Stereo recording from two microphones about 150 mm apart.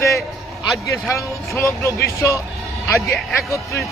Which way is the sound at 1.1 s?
20° left (ahead or behind).